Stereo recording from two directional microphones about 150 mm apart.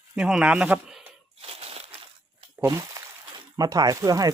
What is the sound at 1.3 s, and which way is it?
Crushing, 40° right (ahead or behind).